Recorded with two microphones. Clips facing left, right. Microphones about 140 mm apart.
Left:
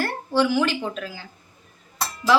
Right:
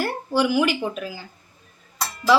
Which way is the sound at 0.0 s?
10° right (ahead or behind).